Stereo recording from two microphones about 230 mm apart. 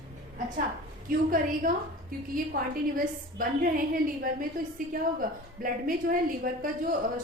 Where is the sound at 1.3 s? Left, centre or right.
Right.